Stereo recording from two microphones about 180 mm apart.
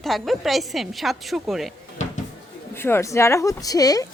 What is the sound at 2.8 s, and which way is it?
Speech, 15° left (ahead or behind).